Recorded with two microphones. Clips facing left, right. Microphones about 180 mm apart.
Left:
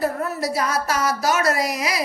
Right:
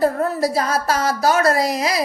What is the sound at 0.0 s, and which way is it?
A woman's voice, 30° right (ahead or behind).